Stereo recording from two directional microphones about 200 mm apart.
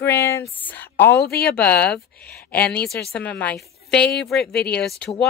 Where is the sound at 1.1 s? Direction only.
55° left (ahead or behind).